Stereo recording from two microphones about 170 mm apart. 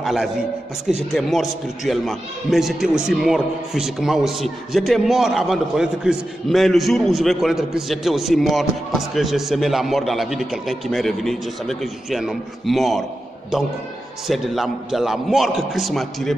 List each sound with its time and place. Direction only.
0.0 s a man's voice: centre (ahead or behind)
14.2 s a man's voice: centre (ahead or behind)